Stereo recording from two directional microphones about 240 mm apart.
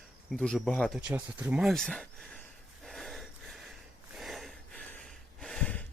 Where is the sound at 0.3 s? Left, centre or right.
Centre.